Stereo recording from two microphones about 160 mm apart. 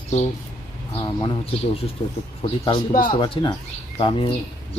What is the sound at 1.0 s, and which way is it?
Speech, 30° left (ahead or behind).